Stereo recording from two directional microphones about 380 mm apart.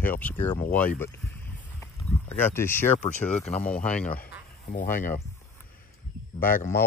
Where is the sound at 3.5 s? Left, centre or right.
Centre.